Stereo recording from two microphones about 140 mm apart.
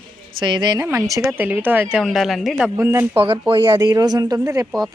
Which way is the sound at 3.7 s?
25° right (ahead or behind).